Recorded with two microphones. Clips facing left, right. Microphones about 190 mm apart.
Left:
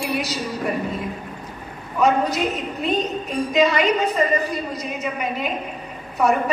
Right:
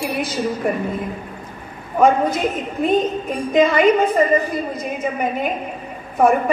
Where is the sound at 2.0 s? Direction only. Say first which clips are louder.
Right 3 dB; 50° right (ahead or behind).